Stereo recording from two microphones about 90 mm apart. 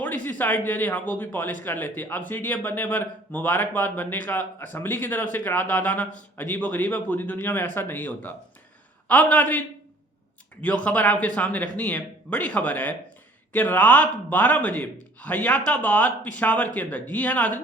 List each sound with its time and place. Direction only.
0.0 s speech: 20° left (ahead or behind)
10.6 s speech: 15° left (ahead or behind)